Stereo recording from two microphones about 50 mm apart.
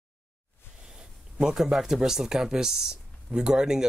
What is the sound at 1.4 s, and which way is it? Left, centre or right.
Speech, centre.